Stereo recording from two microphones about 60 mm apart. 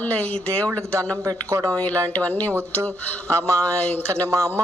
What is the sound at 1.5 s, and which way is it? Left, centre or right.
Speech, right.